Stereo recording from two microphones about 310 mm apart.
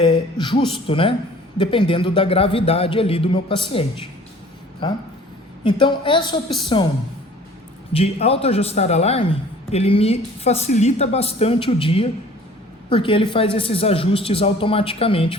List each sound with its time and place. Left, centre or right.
0.0 s a man's voice: centre
7.9 s a man's voice: centre